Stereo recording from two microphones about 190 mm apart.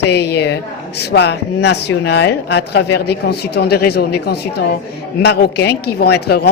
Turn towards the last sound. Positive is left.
turn(degrees=60)  # may be behind; listen again after turning